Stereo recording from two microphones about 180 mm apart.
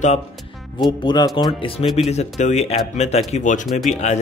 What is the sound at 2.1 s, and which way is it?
Speech, 40° left (ahead or behind).